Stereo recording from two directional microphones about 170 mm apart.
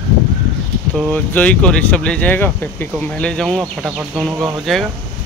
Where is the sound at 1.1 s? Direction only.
5° left (ahead or behind).